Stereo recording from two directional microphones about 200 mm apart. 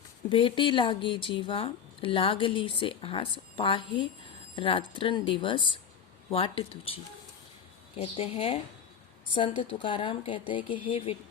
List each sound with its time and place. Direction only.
0.3 s speech: 25° left (ahead or behind)